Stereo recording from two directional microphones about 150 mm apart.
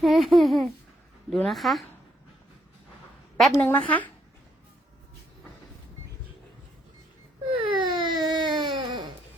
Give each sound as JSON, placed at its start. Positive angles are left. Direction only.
{"t": 0.0, "sound": "speech", "side_deg": 0}
{"t": 3.3, "sound": "a woman's voice", "side_deg": 0}
{"t": 7.5, "sound": "baby cry", "side_deg": -35}